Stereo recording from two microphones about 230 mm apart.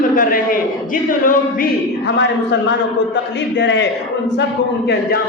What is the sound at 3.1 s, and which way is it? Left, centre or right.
Speech, left.